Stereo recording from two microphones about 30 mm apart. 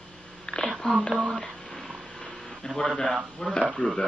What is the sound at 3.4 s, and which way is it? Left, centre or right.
Speech, left.